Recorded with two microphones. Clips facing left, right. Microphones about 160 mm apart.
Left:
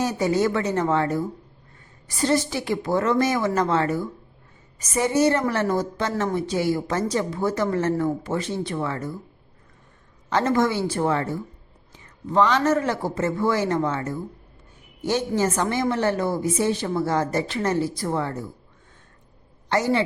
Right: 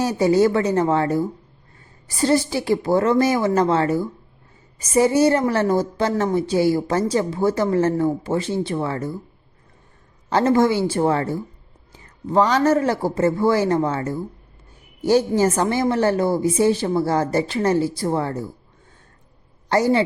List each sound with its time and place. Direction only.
0.0 s a woman's voice: 30° right (ahead or behind)
10.2 s a woman's voice: 30° right (ahead or behind)
15.4 s a woman's voice: 35° right (ahead or behind)
19.6 s a woman's voice: 35° right (ahead or behind)